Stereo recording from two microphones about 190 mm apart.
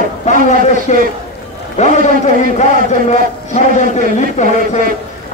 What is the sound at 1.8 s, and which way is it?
Speech, 40° left (ahead or behind).